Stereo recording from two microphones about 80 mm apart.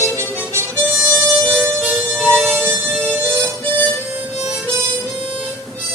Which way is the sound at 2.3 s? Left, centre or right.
Right.